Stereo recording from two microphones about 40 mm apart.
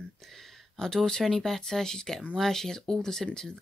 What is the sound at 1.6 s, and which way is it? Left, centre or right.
Speech, centre.